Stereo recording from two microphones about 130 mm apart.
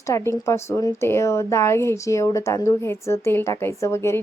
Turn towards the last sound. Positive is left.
turn(degrees=20)  # may be behind; listen again after turning